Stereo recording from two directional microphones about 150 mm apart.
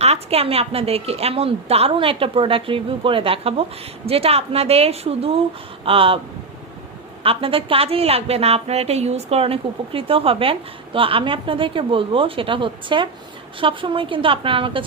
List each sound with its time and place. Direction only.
0.0 s a woman's voice: 45° right (ahead or behind)
7.2 s a woman's voice: 40° right (ahead or behind)